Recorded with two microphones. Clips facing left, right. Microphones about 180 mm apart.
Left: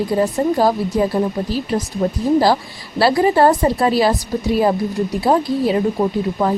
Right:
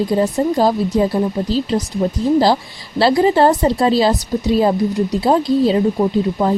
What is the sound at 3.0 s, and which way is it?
A woman's voice, 25° right (ahead or behind).